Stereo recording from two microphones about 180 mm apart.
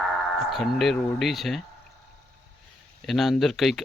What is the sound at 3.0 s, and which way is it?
Speech, centre (ahead or behind).